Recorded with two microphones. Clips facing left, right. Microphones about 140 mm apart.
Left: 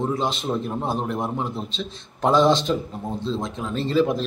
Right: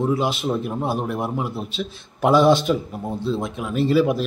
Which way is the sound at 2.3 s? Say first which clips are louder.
Right 2 dB; 20° left (ahead or behind).